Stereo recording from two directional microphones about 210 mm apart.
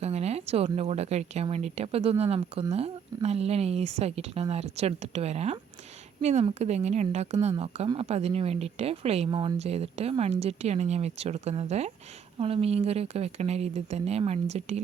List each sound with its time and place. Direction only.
0.0 s speech: 30° right (ahead or behind)